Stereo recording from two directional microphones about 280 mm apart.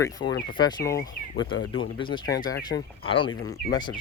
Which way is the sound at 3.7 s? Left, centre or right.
Centre.